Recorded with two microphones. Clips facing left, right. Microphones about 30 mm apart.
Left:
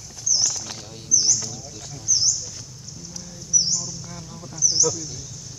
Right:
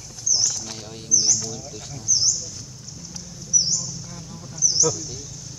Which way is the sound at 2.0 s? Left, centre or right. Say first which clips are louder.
Even; centre.